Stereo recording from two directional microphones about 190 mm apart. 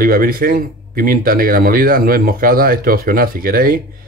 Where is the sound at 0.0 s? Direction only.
50° right (ahead or behind).